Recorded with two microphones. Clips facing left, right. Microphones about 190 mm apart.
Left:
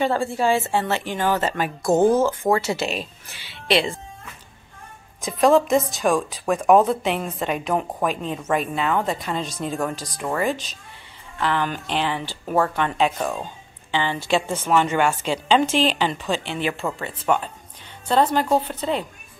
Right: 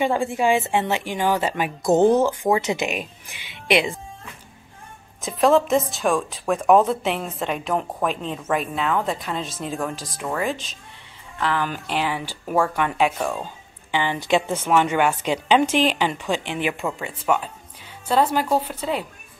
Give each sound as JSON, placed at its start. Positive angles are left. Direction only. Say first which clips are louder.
{"t": 0.0, "sound": "a woman's voice", "louder": "even", "side_deg": -15}
{"t": 5.2, "sound": "a woman's voice", "louder": "left 1 dB", "side_deg": 0}